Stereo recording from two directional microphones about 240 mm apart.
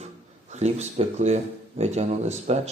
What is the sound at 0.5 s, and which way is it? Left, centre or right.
Speech, right.